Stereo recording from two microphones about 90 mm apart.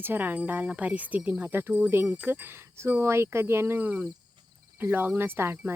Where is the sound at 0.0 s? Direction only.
20° right (ahead or behind).